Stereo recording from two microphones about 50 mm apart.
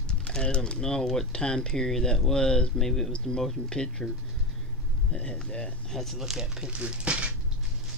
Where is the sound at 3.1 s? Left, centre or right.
Centre.